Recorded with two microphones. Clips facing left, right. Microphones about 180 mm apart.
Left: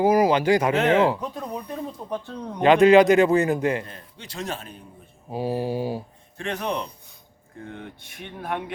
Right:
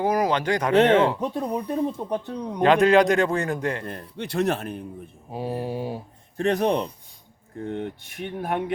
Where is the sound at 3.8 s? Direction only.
60° right (ahead or behind).